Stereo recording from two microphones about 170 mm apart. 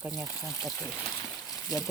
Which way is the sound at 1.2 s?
20° left (ahead or behind).